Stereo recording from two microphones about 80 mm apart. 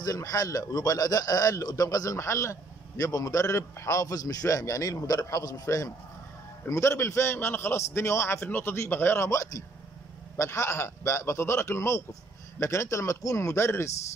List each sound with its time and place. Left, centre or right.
0.0 s a man's voice: left
3.0 s a man's voice: left